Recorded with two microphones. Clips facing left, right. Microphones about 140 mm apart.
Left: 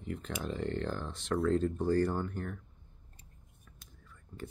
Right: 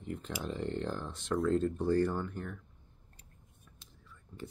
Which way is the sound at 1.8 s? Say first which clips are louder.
Even; 35° left (ahead or behind).